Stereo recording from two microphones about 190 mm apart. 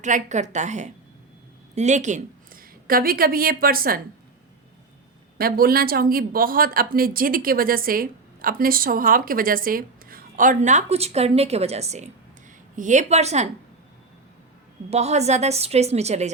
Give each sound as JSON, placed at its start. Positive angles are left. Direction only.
{"t": 0.0, "sound": "a woman's voice", "side_deg": -40}
{"t": 5.4, "sound": "a woman's voice", "side_deg": -50}
{"t": 14.8, "sound": "a woman's voice", "side_deg": -35}